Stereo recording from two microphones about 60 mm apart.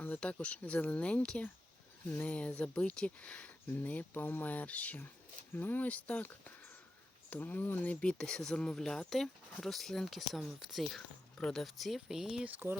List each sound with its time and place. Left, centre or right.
0.2 s speech: left
8.0 s speech: centre
12.5 s speech: right